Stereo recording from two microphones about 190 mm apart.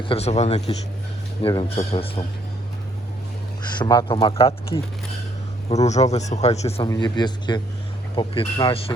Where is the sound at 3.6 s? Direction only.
20° left (ahead or behind).